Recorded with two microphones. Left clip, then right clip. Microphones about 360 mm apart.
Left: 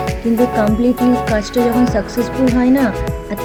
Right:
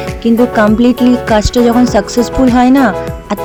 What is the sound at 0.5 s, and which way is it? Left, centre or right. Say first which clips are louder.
Speech: right 5 dB; centre.